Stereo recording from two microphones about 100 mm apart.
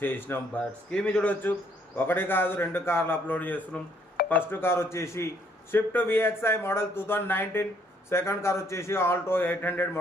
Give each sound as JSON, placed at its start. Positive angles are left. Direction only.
{"t": 0.0, "sound": "speech", "side_deg": 20}